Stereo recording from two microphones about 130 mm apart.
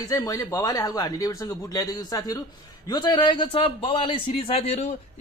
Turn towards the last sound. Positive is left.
turn(degrees=50)  # may be behind; listen again after turning